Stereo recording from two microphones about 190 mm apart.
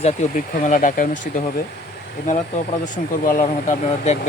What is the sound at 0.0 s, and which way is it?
Speech, 40° left (ahead or behind).